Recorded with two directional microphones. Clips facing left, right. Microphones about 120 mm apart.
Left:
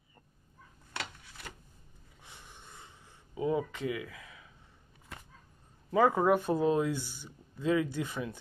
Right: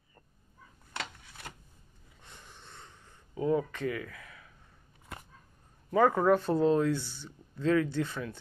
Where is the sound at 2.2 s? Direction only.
10° left (ahead or behind).